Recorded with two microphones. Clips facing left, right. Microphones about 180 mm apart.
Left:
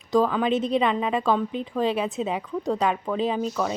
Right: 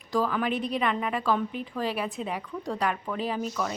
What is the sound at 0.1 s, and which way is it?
A woman's voice, 20° left (ahead or behind).